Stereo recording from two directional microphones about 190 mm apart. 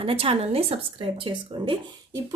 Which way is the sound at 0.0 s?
30° right (ahead or behind).